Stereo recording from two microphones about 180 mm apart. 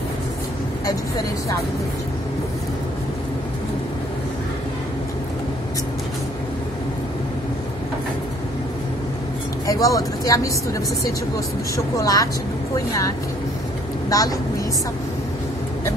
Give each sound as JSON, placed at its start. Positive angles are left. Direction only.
{"t": 9.7, "sound": "a woman's voice", "side_deg": 20}